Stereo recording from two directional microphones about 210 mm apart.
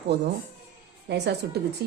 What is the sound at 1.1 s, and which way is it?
Speech, 50° right (ahead or behind).